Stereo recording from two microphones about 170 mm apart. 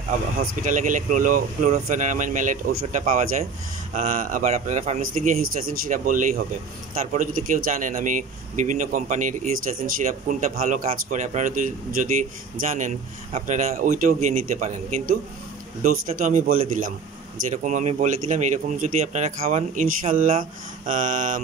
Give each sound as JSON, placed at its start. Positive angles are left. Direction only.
{"t": 0.4, "sound": "a man's voice", "side_deg": -50}